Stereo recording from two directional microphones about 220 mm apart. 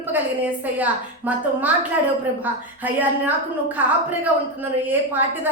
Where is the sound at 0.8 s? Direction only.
5° right (ahead or behind).